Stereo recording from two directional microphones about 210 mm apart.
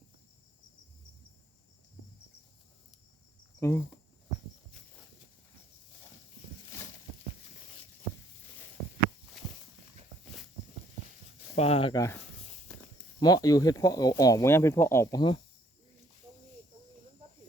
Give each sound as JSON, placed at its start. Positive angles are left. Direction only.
{"t": 3.6, "sound": "speech", "side_deg": 10}
{"t": 11.5, "sound": "speech", "side_deg": 30}